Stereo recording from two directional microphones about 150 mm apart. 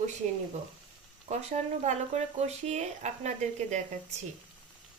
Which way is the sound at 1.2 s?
50° right (ahead or behind).